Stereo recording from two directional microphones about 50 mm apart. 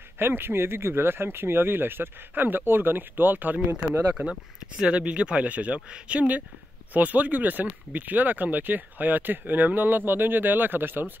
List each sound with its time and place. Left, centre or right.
0.2 s speech: right
4.1 s speech: centre; by 11.1 s right